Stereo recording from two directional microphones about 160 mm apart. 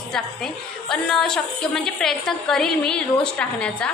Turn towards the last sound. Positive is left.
turn(degrees=5)  # may be behind; listen again after turning